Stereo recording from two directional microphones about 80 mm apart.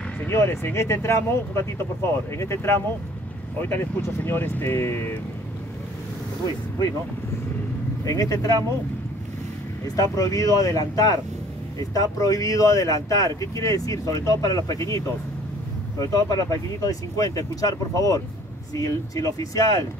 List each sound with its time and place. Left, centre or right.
0.3 s speech: left
8.0 s speech: left
9.9 s speech: left
16.0 s speech: left